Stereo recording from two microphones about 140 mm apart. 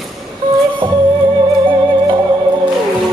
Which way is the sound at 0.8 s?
35° right (ahead or behind).